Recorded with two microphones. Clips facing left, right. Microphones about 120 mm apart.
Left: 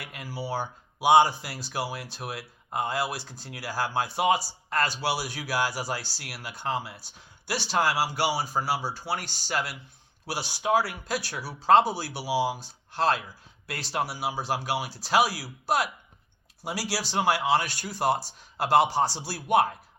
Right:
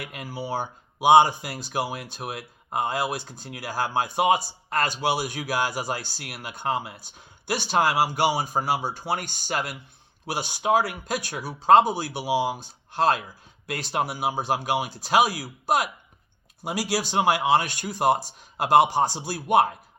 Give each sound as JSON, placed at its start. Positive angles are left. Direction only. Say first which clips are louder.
{"t": 0.0, "sound": "a man's voice", "louder": "right 2 dB", "side_deg": -20}